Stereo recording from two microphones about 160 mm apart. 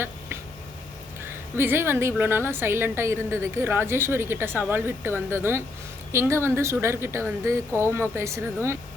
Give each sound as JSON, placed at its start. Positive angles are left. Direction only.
{"t": 1.5, "sound": "a woman's voice", "side_deg": -15}